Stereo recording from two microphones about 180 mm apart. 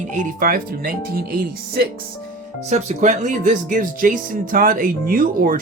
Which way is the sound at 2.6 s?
40° right (ahead or behind).